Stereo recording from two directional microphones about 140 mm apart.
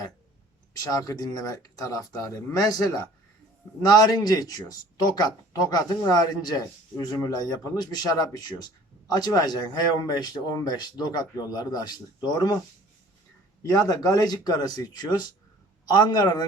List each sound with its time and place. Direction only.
0.8 s speech: 25° left (ahead or behind)
13.6 s speech: 25° left (ahead or behind)